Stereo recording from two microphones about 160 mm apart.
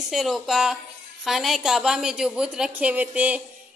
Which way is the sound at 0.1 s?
Centre (ahead or behind).